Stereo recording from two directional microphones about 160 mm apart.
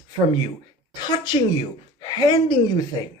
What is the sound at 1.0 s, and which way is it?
A woman's voice, 25° left (ahead or behind).